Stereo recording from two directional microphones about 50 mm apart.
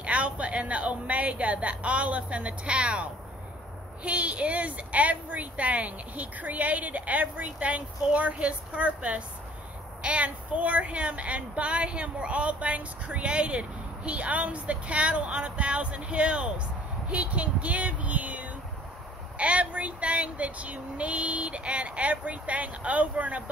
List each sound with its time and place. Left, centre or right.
0.0 s speech: right